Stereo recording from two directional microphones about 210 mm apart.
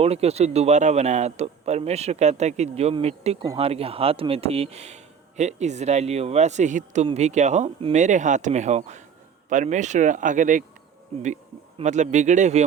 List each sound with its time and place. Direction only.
0.0 s speech: 30° right (ahead or behind)
11.8 s speech: 35° right (ahead or behind)